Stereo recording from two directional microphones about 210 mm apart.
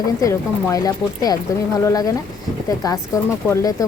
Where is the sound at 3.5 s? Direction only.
15° left (ahead or behind).